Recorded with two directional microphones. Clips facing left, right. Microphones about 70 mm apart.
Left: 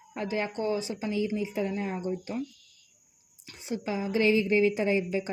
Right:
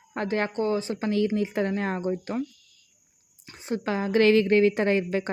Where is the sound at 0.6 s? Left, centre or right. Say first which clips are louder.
Right 4 dB; right.